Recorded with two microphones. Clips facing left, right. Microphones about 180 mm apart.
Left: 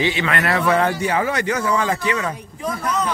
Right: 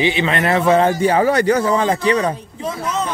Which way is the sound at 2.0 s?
35° right (ahead or behind).